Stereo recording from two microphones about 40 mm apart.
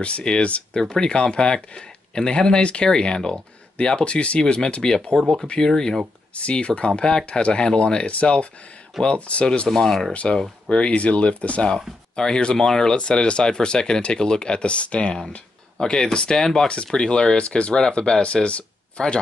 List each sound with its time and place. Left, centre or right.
0.0 s speech: left
0.7 s speech: centre
1.0 s speech: left
3.2 s speech: centre
3.7 s speech: left
4.4 s speech: centre
6.3 s speech: left
9.7 s speech: centre; by 11.6 s left
12.2 s speech: left
15.8 s speech: centre
16.6 s speech: left